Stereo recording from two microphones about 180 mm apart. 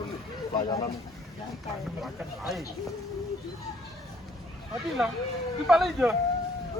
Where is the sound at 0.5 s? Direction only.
20° left (ahead or behind).